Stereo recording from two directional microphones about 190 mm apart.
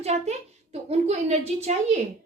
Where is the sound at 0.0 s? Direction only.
35° right (ahead or behind).